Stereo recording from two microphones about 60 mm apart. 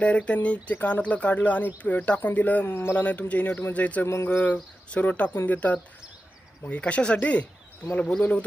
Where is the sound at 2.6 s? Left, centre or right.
Left.